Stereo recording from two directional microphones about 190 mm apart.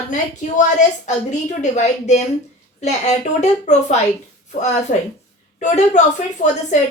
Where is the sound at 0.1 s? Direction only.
40° left (ahead or behind).